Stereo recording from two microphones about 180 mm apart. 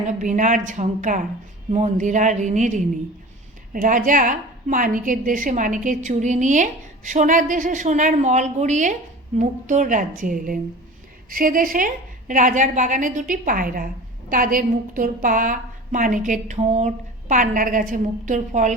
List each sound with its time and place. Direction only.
0.1 s a woman's voice: 45° right (ahead or behind)